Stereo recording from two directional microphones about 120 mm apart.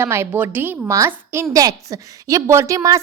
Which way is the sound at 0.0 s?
20° right (ahead or behind).